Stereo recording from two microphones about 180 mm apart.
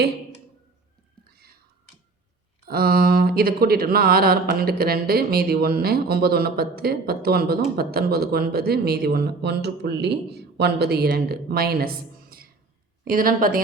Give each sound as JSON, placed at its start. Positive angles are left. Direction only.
{"t": 2.6, "sound": "speech", "side_deg": -55}
{"t": 12.2, "sound": "music", "side_deg": -55}
{"t": 13.1, "sound": "a woman's voice", "side_deg": -50}